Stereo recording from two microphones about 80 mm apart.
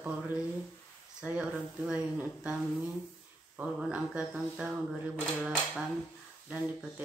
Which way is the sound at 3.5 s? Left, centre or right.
Centre.